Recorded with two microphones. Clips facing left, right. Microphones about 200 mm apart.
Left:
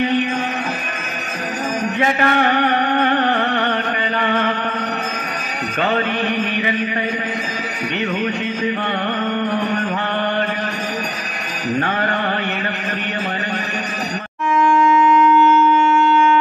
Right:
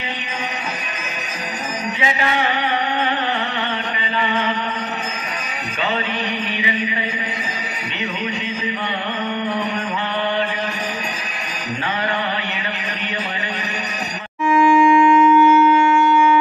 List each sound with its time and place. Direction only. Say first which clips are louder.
2.0 s music: left 4 dB; 55° left (ahead or behind)
5.8 s music: left 4 dB; 55° left (ahead or behind)
14.5 s wind instrument: right 2 dB; 5° right (ahead or behind)